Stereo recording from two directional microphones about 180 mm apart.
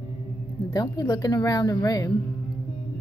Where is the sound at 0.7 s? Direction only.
20° left (ahead or behind).